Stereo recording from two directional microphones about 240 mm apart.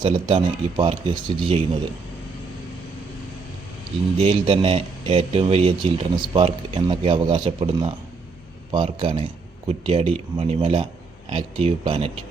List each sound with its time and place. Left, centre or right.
0.0 s speech: right
4.2 s speech: right